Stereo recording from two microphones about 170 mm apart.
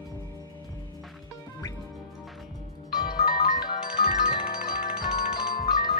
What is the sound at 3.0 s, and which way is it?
Music, 60° left (ahead or behind).